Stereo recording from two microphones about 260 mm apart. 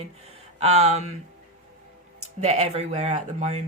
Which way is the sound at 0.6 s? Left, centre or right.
Right.